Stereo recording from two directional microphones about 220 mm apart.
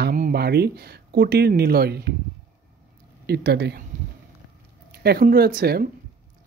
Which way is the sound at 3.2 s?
45° right (ahead or behind).